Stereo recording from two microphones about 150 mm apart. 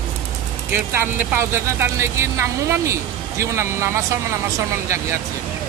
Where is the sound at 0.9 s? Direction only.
15° right (ahead or behind).